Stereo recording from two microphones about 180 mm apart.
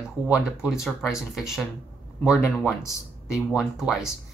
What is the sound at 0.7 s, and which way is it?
Speech, 15° left (ahead or behind).